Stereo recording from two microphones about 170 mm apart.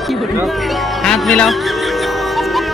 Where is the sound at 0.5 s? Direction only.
Centre (ahead or behind).